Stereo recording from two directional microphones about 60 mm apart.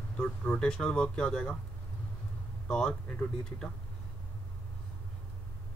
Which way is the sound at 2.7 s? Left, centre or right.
Centre.